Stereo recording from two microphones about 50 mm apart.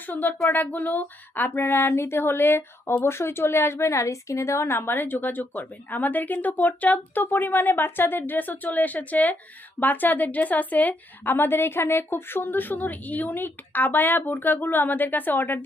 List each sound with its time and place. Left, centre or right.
0.1 s a woman's voice: left
11.3 s a woman's voice: left